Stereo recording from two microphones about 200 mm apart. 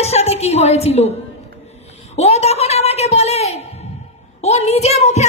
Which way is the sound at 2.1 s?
30° left (ahead or behind).